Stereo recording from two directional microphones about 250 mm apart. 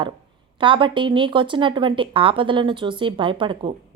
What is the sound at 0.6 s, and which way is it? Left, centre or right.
Speech, centre.